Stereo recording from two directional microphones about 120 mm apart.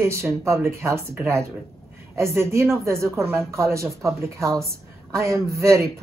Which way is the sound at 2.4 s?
25° right (ahead or behind).